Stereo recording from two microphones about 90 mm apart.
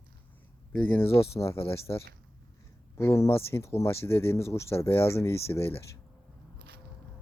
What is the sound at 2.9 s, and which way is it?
Speech, 30° left (ahead or behind).